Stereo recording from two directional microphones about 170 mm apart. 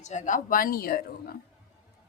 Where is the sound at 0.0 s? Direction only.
45° left (ahead or behind).